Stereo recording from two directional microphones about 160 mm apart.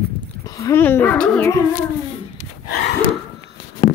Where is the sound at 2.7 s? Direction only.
90° left.